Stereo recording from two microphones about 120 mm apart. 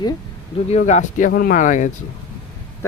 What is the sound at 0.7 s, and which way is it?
Speech, 75° left (ahead or behind).